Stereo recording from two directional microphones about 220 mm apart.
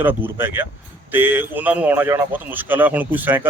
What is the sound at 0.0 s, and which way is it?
Speech, 10° right (ahead or behind).